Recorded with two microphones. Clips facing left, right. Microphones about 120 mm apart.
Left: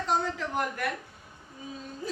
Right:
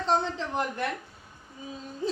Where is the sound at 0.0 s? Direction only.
25° right (ahead or behind).